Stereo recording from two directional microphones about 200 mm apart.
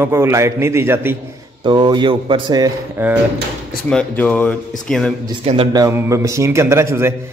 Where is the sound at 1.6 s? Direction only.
20° right (ahead or behind).